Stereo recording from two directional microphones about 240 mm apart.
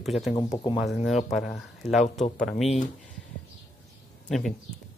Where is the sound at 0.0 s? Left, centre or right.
Centre.